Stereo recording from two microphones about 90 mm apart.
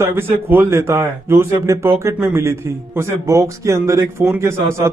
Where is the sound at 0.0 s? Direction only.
25° right (ahead or behind).